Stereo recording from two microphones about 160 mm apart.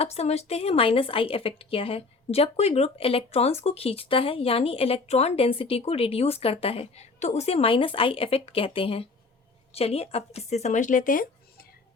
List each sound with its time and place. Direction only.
0.0 s a woman's voice: 40° left (ahead or behind); by 11.6 s 60° left (ahead or behind)